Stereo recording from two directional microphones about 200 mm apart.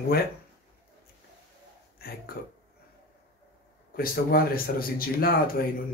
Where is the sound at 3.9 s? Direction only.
50° left (ahead or behind).